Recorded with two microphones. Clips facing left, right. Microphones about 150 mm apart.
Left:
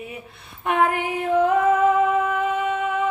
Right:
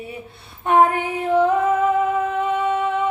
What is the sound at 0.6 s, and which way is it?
Female singing, 30° right (ahead or behind).